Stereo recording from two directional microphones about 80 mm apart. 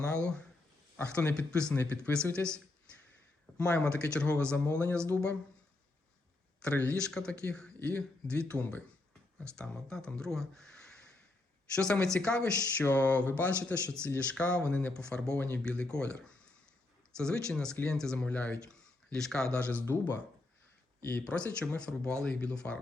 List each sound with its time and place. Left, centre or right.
0.1 s a sound: centre
0.9 s speech: centre
3.6 s speech: centre
6.6 s speech: centre
12.8 s speech: left
21.0 s speech: centre